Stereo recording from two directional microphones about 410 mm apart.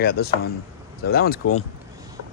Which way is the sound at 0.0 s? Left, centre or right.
Left.